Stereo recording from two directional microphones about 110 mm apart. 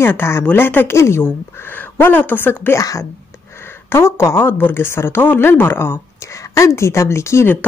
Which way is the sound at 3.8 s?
20° left (ahead or behind).